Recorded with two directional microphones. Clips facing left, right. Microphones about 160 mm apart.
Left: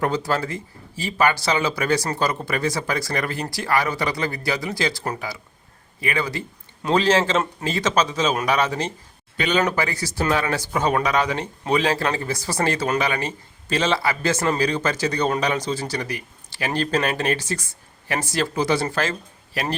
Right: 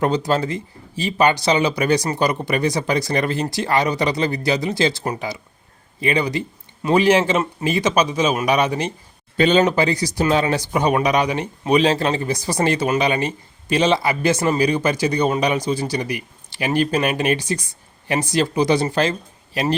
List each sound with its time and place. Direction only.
0.0 s speech: 20° right (ahead or behind)
9.4 s speech: 25° right (ahead or behind)